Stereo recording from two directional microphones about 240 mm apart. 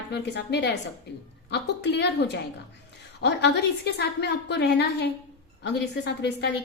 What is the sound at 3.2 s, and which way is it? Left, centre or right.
A woman's voice, left.